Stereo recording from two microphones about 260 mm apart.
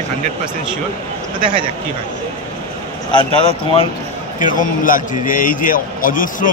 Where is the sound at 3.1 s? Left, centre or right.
Left.